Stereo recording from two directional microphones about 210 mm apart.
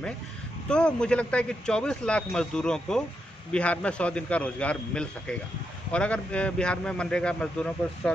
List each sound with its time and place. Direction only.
0.7 s a man's voice: 5° left (ahead or behind)